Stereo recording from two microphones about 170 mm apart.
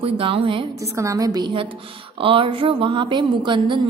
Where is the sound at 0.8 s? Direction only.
20° right (ahead or behind).